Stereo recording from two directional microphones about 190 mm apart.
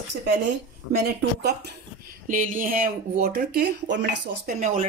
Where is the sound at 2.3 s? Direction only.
45° right (ahead or behind); by 4.5 s 65° right (ahead or behind).